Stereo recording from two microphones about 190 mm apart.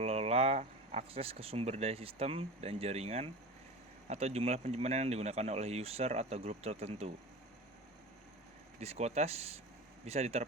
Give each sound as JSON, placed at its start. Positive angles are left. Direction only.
{"t": 0.0, "sound": "speech", "side_deg": -35}
{"t": 8.8, "sound": "speech", "side_deg": -35}